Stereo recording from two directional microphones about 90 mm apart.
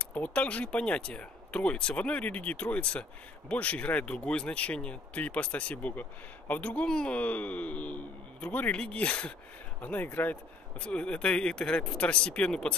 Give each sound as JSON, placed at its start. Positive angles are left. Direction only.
{"t": 0.0, "sound": "speech", "side_deg": 15}